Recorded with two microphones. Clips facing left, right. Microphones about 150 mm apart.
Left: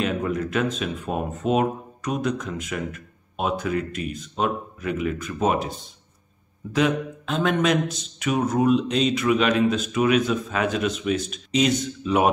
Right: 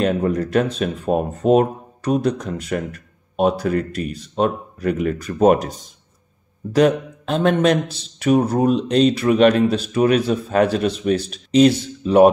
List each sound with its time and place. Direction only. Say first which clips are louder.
0.0 s speech: right 6 dB; 35° right (ahead or behind)
6.7 s speech: right 6 dB; 40° right (ahead or behind)